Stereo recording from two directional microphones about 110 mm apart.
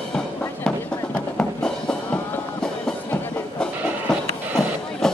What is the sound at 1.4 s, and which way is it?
Music, 10° left (ahead or behind).